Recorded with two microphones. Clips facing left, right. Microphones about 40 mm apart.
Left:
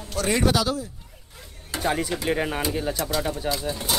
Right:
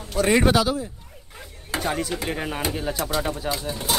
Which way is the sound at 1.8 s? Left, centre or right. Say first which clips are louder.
Left 3 dB; centre.